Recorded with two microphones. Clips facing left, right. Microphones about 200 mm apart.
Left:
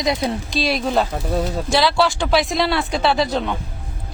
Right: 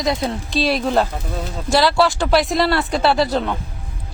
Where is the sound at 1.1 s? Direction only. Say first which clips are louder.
Left 6 dB; 45° left (ahead or behind).